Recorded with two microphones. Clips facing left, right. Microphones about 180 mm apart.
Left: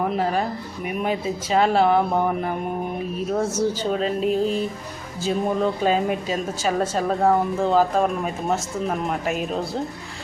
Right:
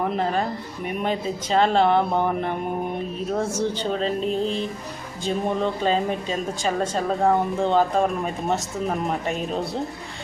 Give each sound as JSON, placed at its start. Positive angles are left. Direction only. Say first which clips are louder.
{"t": 0.0, "sound": "a woman's voice", "louder": "left 1 dB", "side_deg": 5}
{"t": 3.6, "sound": "a woman's voice", "louder": "left 2 dB", "side_deg": 5}